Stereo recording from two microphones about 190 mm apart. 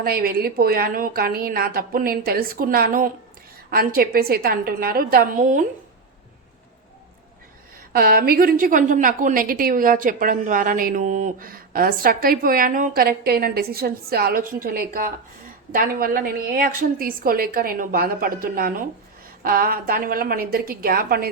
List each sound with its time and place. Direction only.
0.0 s a woman's voice: 50° right (ahead or behind)
7.9 s a woman's voice: 50° right (ahead or behind)